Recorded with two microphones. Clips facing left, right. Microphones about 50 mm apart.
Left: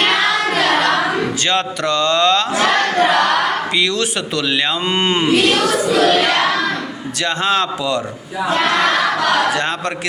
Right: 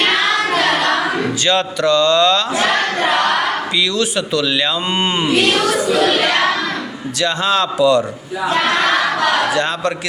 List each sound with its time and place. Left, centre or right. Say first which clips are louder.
1.5 s speech: right 5 dB; left
3.8 s speech: right 1 dB; left
4.9 s speech: left 1 dB; left
7.2 s a man's voice: right 1 dB; left
7.8 s a man's voice: right 7 dB; left
9.6 s a man's voice: right 2 dB; left